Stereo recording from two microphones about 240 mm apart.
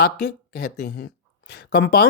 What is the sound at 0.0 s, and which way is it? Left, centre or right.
Speech, left.